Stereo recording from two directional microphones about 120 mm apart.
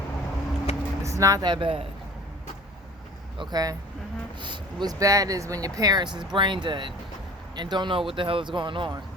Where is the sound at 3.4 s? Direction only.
35° right (ahead or behind).